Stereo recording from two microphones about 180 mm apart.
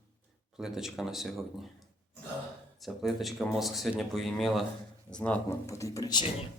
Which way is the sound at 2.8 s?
Centre (ahead or behind).